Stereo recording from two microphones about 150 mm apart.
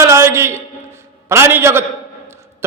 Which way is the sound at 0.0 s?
20° right (ahead or behind).